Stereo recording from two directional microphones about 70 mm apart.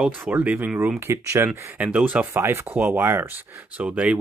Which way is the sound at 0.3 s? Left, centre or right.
Right.